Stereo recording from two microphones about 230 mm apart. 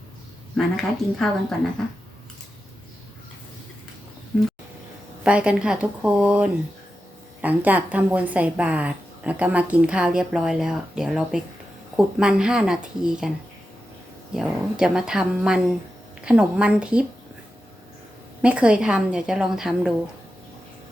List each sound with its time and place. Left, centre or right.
0.5 s a woman's voice: centre
5.2 s a woman's voice: centre
14.3 s a woman's voice: centre
18.4 s a woman's voice: centre